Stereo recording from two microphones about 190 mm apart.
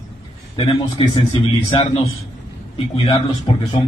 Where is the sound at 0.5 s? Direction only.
25° left (ahead or behind).